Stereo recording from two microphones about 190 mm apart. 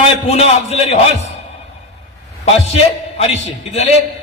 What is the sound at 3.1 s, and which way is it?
Speech, 35° left (ahead or behind).